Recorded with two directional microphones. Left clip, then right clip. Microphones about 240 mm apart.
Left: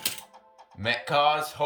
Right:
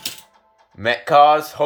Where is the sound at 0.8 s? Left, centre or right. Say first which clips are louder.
Right 11 dB; centre.